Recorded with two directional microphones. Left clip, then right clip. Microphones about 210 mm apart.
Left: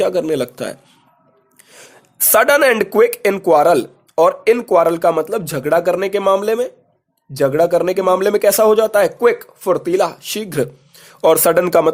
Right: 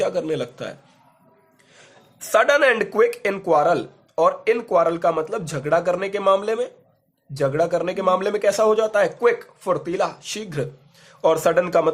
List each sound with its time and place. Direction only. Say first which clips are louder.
0.0 s speech: left 6 dB; 40° left (ahead or behind)
2.3 s speech: left 4 dB; 40° left (ahead or behind)